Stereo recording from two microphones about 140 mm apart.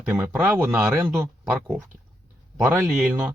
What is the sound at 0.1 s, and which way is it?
Speech, 15° right (ahead or behind).